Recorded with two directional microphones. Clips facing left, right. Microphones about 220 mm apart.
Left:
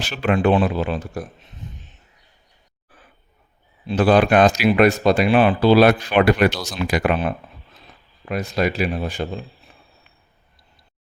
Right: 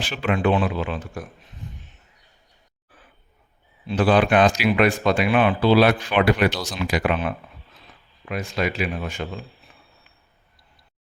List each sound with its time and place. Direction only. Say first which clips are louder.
0.0 s speech: left 3 dB; 40° left (ahead or behind)
3.8 s speech: left 3 dB; 40° left (ahead or behind)